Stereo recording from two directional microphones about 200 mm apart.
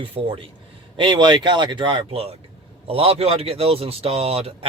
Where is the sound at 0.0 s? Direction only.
30° right (ahead or behind).